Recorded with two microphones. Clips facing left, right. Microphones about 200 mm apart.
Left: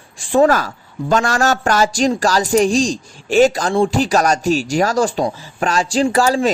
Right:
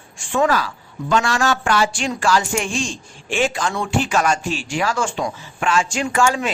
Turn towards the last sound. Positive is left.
turn(degrees=35)  # may be behind; listen again after turning